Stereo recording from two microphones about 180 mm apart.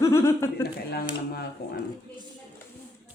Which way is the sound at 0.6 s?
65° left (ahead or behind).